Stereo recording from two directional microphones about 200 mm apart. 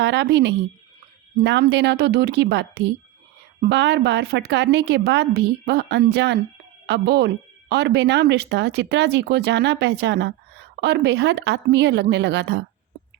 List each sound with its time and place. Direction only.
0.0 s a woman's voice: 60° right (ahead or behind)
1.6 s a woman's voice: 60° right (ahead or behind)